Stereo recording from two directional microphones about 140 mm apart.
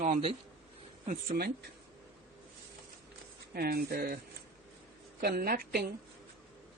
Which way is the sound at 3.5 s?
90° right.